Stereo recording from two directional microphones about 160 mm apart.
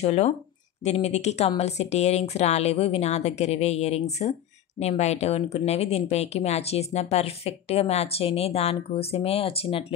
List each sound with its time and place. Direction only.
0.0 s a woman's voice: 40° left (ahead or behind)